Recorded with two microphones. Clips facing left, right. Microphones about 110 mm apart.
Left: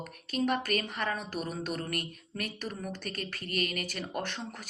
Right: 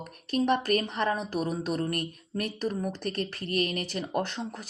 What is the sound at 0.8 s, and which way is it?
Speech, 30° right (ahead or behind).